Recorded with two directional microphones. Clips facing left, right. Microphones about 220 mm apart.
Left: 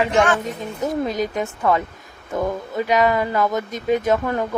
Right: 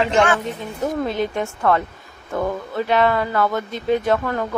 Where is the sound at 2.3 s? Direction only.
15° left (ahead or behind).